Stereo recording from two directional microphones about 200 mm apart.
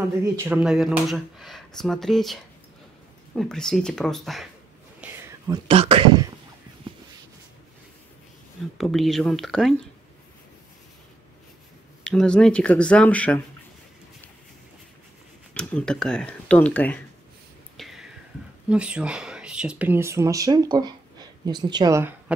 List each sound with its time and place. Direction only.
0.4 s speech: 5° right (ahead or behind)
5.0 s a sound: 5° right (ahead or behind)
5.7 s speech: 30° right (ahead or behind)
6.8 s a sound: 25° right (ahead or behind)
8.7 s speech: centre (ahead or behind)
12.0 s speech: 5° left (ahead or behind)
15.5 s speech: 5° left (ahead or behind)
17.7 s whispering: centre (ahead or behind)
18.7 s speech: 5° right (ahead or behind)